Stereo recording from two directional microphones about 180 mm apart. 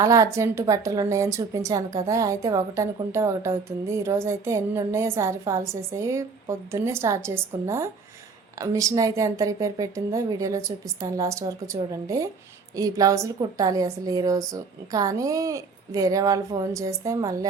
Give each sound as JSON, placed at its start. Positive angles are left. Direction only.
{"t": 0.0, "sound": "a woman's voice", "side_deg": -20}